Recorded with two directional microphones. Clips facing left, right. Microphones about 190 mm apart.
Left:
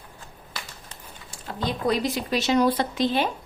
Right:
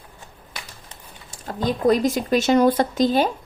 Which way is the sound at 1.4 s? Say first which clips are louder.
Right 6 dB; 45° right (ahead or behind).